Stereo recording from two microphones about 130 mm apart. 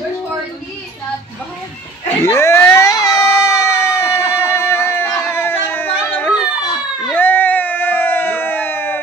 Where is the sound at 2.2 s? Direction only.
20° left (ahead or behind).